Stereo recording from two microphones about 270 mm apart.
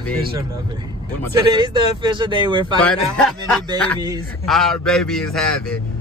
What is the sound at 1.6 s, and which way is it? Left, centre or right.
Speech, centre.